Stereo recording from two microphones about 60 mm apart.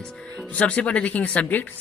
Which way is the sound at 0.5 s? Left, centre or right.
Left.